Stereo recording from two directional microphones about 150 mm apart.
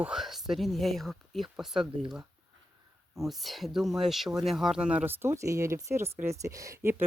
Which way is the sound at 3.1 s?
Centre (ahead or behind).